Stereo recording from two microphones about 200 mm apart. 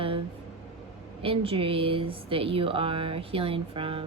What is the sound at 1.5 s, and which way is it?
Speech, 25° right (ahead or behind).